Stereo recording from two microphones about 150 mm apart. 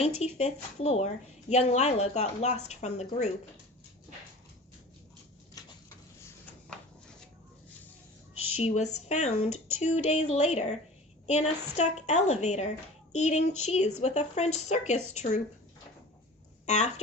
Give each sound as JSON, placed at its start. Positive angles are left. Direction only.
{"t": 0.0, "sound": "a woman's voice", "side_deg": 45}
{"t": 8.5, "sound": "a woman's voice", "side_deg": 50}
{"t": 16.6, "sound": "speech", "side_deg": 50}